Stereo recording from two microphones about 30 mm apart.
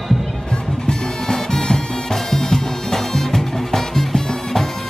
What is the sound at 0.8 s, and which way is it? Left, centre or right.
Music, centre.